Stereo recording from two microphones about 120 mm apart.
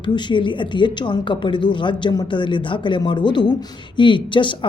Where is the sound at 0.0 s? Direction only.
40° left (ahead or behind).